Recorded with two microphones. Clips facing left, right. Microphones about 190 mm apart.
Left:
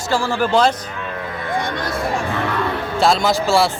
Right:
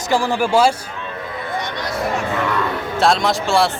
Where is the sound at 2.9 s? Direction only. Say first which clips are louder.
Left 1 dB; centre (ahead or behind).